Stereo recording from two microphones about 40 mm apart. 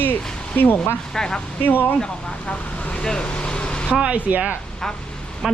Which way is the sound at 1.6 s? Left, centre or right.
Left.